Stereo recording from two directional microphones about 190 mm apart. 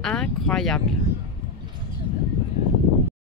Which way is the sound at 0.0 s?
5° left (ahead or behind).